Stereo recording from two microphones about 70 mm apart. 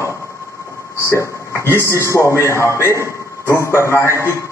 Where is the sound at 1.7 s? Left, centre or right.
Left.